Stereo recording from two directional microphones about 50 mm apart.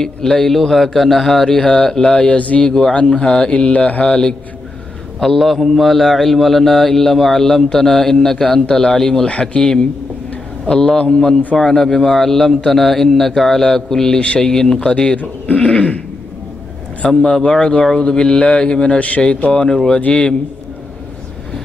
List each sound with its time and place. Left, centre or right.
0.0 s a man's voice: centre
2.2 s a man's voice: left
4.0 s a man's voice: centre
5.2 s a man's voice: centre
9.3 s a man's voice: left
15.1 s a man's voice: left
17.0 s a man's voice: left
19.7 s a man's voice: centre